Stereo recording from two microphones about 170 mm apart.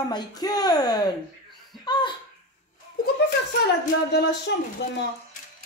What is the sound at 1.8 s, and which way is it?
Laughter, 25° left (ahead or behind).